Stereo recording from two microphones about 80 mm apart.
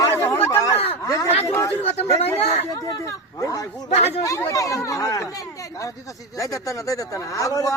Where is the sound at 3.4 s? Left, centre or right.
Left.